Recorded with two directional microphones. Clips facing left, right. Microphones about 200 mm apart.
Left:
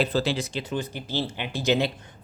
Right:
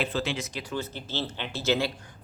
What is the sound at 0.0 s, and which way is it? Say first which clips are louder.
Speech: left 5 dB; 35° left (ahead or behind).